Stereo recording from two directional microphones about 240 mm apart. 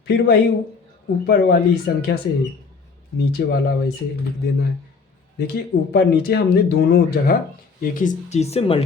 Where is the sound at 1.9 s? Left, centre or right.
Left.